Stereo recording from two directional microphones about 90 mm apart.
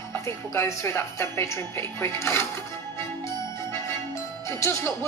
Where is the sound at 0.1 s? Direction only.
30° left (ahead or behind).